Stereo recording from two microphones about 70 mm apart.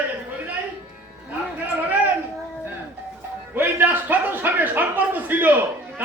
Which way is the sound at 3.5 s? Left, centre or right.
Right.